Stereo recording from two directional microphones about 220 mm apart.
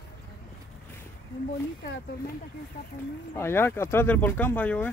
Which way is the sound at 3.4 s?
10° left (ahead or behind).